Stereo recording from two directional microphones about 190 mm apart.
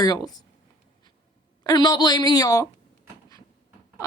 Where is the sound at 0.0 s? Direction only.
20° left (ahead or behind).